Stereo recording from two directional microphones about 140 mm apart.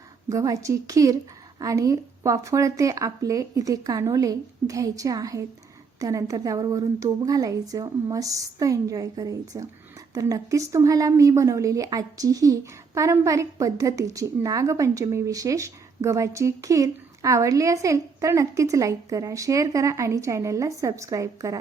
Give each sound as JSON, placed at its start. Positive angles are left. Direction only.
{"t": 0.3, "sound": "a woman's voice", "side_deg": -25}